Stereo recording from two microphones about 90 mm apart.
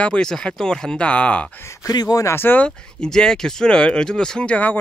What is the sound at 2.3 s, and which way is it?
Speech, 25° left (ahead or behind).